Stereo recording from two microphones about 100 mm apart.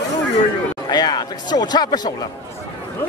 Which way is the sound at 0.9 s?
45° left (ahead or behind).